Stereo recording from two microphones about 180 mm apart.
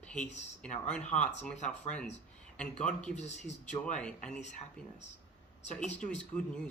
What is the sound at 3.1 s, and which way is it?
Speech, 40° left (ahead or behind).